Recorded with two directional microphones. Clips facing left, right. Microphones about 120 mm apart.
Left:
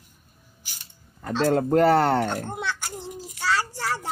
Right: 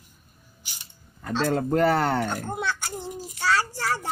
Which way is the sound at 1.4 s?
40° left (ahead or behind).